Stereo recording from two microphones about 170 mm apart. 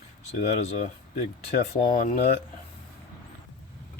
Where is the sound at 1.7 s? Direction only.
50° left (ahead or behind).